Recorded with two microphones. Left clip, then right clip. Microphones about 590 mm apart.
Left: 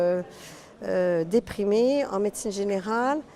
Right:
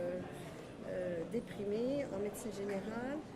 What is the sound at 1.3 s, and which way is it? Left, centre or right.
A woman's voice, left.